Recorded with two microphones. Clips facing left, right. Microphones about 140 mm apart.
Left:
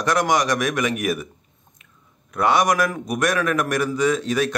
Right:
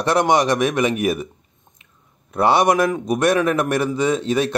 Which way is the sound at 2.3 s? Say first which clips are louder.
Right 3 dB; 30° right (ahead or behind).